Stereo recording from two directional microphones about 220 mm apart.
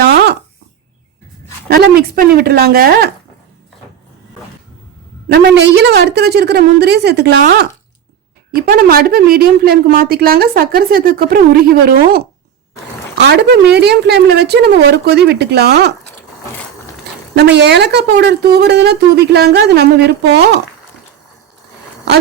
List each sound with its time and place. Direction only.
0.0 s a sound: 45° right (ahead or behind)
1.6 s a woman's voice: 45° right (ahead or behind)
5.3 s a woman's voice: 50° right (ahead or behind)
17.3 s a woman's voice: 50° right (ahead or behind)